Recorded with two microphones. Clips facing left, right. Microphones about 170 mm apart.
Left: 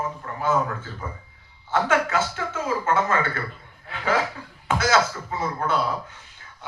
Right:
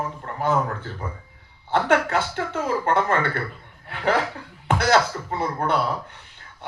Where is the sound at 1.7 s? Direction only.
60° right (ahead or behind).